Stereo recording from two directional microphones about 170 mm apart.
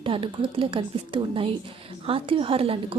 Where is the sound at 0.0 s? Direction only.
30° right (ahead or behind).